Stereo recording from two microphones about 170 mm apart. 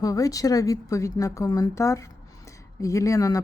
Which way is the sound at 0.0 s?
20° left (ahead or behind).